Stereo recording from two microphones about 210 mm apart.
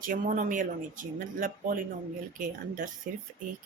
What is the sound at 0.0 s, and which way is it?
Speech, 40° right (ahead or behind).